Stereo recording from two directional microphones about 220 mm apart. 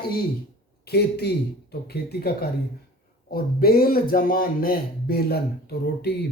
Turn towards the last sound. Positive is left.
turn(degrees=45)  # may be behind; listen again after turning